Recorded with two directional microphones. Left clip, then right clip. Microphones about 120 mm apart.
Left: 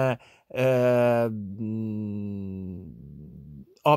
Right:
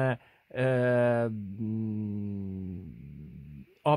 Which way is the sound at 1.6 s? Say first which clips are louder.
Left 3 dB; 5° left (ahead or behind).